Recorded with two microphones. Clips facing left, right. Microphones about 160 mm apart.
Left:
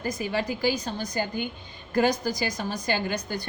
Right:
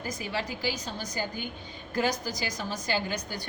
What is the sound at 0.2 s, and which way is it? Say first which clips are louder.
A woman's voice: left 7 dB; 50° left (ahead or behind).